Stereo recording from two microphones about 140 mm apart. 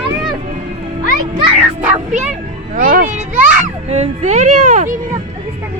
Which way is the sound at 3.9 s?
55° right (ahead or behind).